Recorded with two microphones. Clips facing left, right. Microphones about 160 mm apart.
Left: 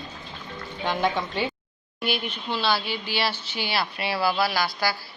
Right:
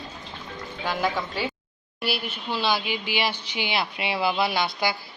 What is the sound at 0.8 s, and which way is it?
Speech, 5° right (ahead or behind).